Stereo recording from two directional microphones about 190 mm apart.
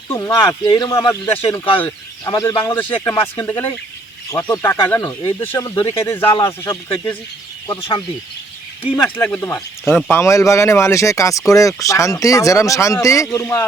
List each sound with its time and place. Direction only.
0.1 s speech: 10° left (ahead or behind)
0.3 s a man's voice: 25° left (ahead or behind)
5.7 s a man's voice: 25° left (ahead or behind)
6.0 s speech: 15° left (ahead or behind)
7.8 s a man's voice: 25° left (ahead or behind)
9.1 s speech: 5° left (ahead or behind)